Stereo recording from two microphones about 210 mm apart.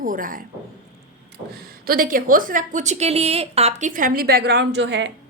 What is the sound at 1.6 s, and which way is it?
A woman's voice, 45° right (ahead or behind).